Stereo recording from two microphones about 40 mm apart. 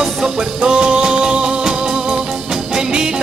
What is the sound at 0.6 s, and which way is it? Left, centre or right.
Music, right.